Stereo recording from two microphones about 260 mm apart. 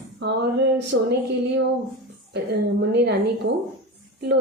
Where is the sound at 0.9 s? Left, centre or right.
Right.